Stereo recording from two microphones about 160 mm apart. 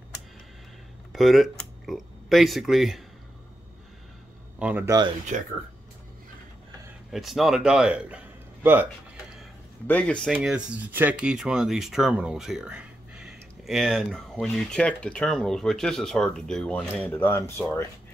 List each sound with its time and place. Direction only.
1.1 s speech: centre (ahead or behind)
4.6 s speech: 10° right (ahead or behind)
5.3 s speech: 50° right (ahead or behind)
7.1 s speech: centre (ahead or behind)
9.8 s speech: 10° left (ahead or behind)